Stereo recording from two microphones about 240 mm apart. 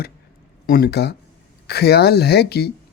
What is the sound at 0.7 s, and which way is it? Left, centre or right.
Speech, left.